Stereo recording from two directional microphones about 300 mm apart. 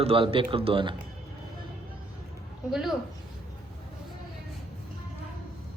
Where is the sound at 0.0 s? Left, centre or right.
Centre.